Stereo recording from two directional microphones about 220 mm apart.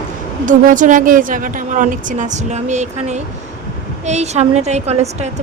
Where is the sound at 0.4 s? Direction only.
35° right (ahead or behind).